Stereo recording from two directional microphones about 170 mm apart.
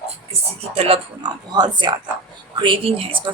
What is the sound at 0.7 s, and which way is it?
Speech, 35° right (ahead or behind).